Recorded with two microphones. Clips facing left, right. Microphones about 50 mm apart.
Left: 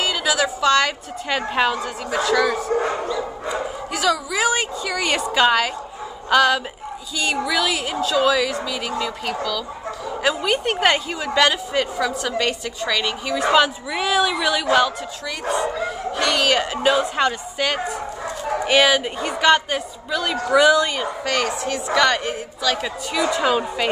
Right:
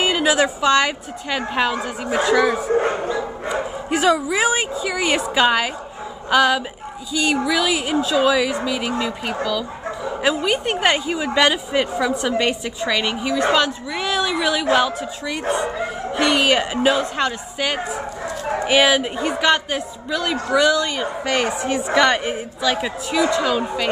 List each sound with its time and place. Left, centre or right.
0.0 s a woman's voice: right
1.3 s a man's voice: centre
1.8 s speech: right
2.8 s speech: right; by 13.3 s centre
13.3 s a man's voice: centre
15.4 s speech: right
16.2 s speech: right
17.0 s a man's voice: centre
18.7 s a man's voice: centre
20.4 s a woman's voice: centre
21.0 s speech: centre
23.3 s a woman's voice: centre